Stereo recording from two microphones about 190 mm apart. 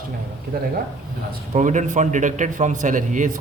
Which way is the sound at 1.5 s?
40° right (ahead or behind).